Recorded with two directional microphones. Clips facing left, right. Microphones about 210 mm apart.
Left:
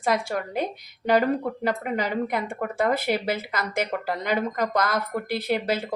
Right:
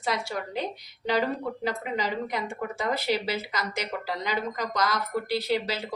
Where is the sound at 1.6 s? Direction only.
55° left (ahead or behind).